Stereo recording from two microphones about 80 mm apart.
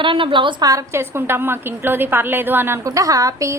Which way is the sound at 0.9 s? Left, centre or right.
Right.